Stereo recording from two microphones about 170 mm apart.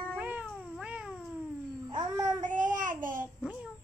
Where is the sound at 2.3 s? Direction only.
50° right (ahead or behind).